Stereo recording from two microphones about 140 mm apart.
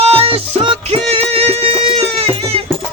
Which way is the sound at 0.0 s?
45° right (ahead or behind).